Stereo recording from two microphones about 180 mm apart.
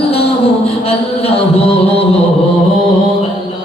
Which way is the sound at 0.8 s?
35° left (ahead or behind).